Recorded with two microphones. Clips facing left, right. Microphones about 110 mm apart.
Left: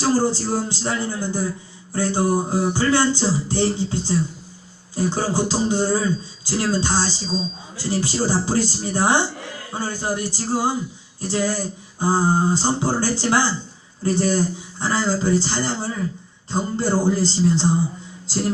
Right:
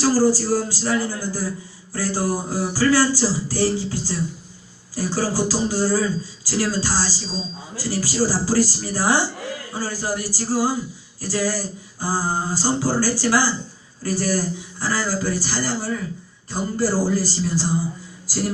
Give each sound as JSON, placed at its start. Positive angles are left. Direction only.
{"t": 0.0, "sound": "a man's voice", "side_deg": 25}
{"t": 18.3, "sound": "music", "side_deg": 25}